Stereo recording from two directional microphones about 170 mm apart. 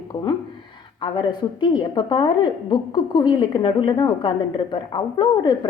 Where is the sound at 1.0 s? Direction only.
25° left (ahead or behind).